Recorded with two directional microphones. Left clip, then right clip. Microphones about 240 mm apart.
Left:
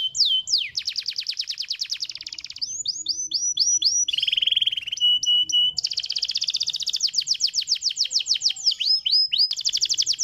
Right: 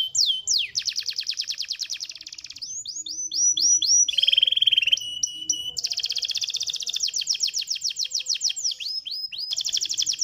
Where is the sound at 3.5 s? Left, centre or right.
Centre.